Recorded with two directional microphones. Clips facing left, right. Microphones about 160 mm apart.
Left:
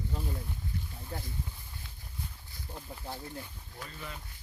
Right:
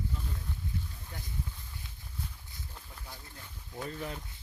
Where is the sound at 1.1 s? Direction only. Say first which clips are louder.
Left 7 dB; 35° left (ahead or behind).